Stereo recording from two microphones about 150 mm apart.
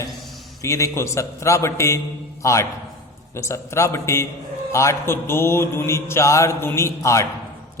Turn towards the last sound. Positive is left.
turn(degrees=20)  # may be behind; listen again after turning